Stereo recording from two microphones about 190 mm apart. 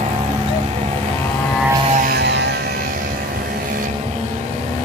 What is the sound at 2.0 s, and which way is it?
Music, 55° right (ahead or behind).